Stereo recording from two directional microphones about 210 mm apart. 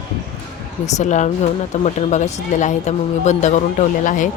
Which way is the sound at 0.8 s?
35° left (ahead or behind).